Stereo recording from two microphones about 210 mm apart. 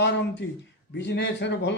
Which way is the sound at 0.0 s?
55° left (ahead or behind).